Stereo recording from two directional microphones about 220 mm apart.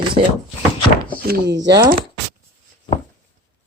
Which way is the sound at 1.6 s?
15° right (ahead or behind).